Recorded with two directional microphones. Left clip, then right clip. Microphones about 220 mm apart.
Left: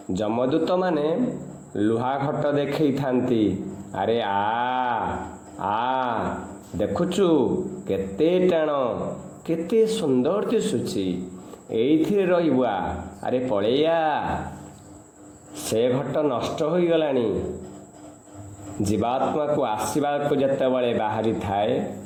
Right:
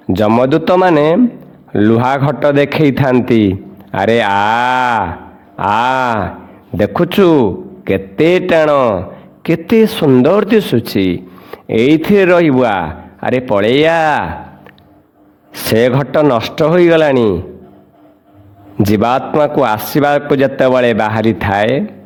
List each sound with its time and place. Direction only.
0.1 s a man's voice: 45° right (ahead or behind)
15.7 s a man's voice: 45° right (ahead or behind)
18.9 s a man's voice: 45° right (ahead or behind)